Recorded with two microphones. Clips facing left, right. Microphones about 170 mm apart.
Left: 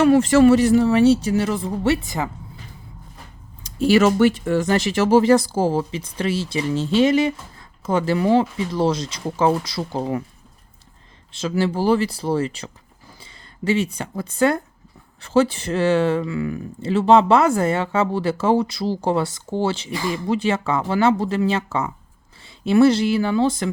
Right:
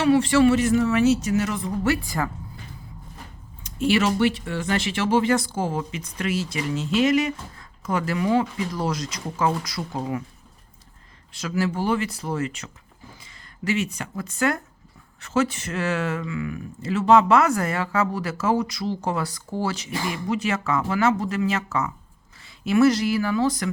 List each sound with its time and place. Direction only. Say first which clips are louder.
0.0 s speech: left 4 dB; 45° left (ahead or behind); by 2.3 s 20° left (ahead or behind)
3.6 s speech: left 6 dB; 35° left (ahead or behind)
11.3 s speech: left 4 dB; 25° left (ahead or behind)